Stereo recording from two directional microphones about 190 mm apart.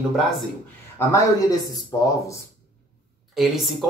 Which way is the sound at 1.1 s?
15° left (ahead or behind).